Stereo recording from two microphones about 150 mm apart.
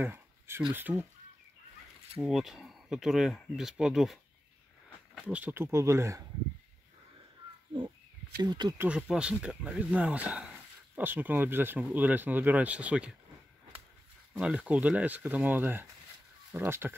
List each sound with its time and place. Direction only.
0.0 s a sound: 15° right (ahead or behind)
0.7 s speech: 10° right (ahead or behind)
2.1 s speech: centre (ahead or behind)
5.2 s speech: 10° right (ahead or behind)
7.7 s speech: 30° right (ahead or behind)
8.7 s speech: 10° right (ahead or behind)
14.3 s speech: 5° right (ahead or behind)